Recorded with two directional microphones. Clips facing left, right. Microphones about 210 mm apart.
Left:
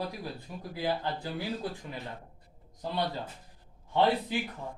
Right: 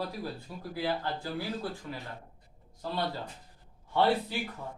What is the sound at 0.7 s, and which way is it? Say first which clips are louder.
A man's voice: left 1 dB; 15° left (ahead or behind).